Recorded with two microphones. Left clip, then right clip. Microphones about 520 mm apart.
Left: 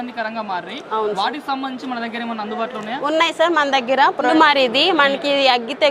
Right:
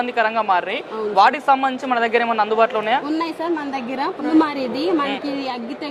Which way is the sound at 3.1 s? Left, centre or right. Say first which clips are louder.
Left 7 dB; left.